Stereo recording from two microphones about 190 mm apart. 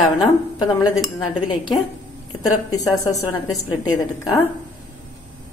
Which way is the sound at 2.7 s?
20° left (ahead or behind).